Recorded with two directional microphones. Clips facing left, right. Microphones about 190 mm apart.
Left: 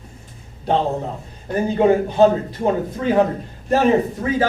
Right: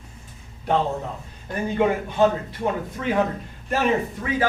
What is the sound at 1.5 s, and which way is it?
Speech, 35° left (ahead or behind).